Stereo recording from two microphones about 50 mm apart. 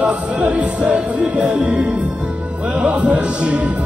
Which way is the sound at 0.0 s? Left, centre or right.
Right.